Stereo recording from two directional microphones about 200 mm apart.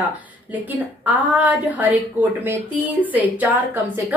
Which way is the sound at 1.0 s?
10° right (ahead or behind).